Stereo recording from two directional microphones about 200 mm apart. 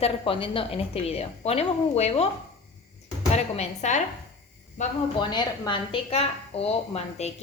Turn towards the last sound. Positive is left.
turn(degrees=30)  # may be behind; listen again after turning